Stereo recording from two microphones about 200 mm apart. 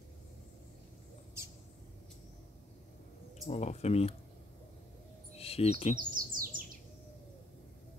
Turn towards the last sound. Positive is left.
turn(degrees=-45)  # may be behind; listen again after turning